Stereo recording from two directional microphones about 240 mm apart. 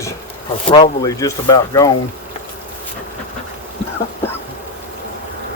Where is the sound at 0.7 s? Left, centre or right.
Centre.